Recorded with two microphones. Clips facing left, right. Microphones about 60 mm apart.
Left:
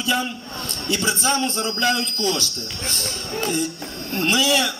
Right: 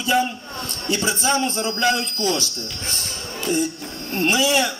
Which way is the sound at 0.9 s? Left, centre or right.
Right.